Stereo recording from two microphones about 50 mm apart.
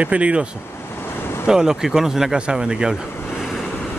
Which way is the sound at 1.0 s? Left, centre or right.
Left.